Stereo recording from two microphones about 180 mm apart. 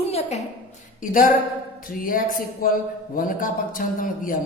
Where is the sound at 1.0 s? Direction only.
45° left (ahead or behind).